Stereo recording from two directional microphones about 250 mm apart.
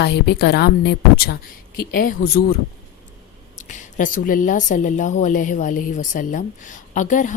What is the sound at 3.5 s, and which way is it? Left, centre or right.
A woman's voice, left.